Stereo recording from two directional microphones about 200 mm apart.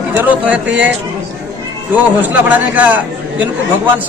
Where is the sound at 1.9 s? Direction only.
10° right (ahead or behind).